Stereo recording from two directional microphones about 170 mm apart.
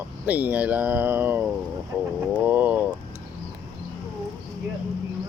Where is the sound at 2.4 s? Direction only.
10° right (ahead or behind).